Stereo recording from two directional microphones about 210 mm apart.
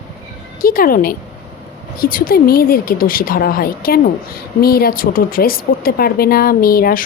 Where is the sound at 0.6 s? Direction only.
40° left (ahead or behind).